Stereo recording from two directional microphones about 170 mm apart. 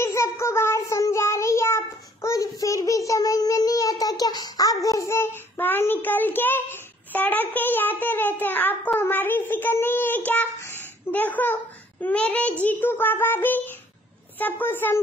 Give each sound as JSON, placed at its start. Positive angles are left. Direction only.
{"t": 0.0, "sound": "child singing", "side_deg": 15}
{"t": 12.6, "sound": "a child's voice", "side_deg": 10}